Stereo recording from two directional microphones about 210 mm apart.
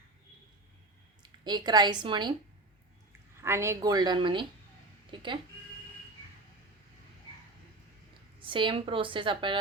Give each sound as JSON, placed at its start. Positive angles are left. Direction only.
{"t": 1.5, "sound": "a woman's voice", "side_deg": -20}
{"t": 3.4, "sound": "a woman's voice", "side_deg": -10}
{"t": 8.4, "sound": "a woman's voice", "side_deg": -25}